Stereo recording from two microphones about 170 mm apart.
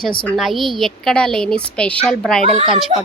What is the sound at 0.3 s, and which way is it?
A woman's voice, centre (ahead or behind).